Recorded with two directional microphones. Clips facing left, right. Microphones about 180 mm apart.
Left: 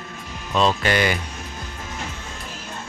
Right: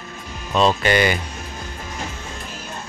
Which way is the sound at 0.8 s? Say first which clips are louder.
Right 3 dB; centre (ahead or behind).